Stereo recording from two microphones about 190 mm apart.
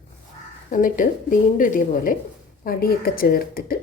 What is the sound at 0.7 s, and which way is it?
A woman's voice, 45° left (ahead or behind).